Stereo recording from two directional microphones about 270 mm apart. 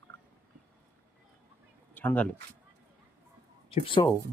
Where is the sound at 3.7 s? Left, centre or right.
Centre.